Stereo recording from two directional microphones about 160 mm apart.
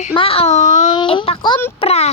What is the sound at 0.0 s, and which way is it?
Speech, 35° left (ahead or behind).